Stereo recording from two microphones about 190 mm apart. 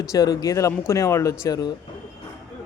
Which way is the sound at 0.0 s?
20° left (ahead or behind).